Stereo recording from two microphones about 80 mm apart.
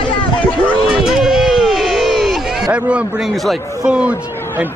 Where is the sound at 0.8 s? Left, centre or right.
Centre.